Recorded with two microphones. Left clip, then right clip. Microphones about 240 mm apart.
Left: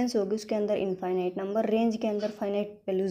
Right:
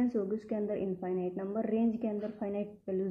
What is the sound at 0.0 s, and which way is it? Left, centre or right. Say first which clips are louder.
Speech: left 5 dB; left.